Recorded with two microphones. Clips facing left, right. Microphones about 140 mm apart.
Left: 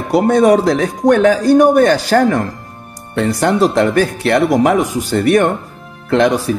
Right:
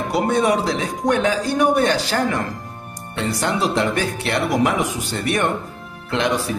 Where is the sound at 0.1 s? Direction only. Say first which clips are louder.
Left 9 dB; 45° left (ahead or behind).